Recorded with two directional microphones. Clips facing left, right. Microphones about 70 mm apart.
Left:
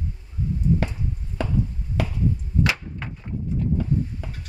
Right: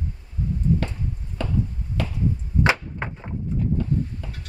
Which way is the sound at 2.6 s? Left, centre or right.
Right.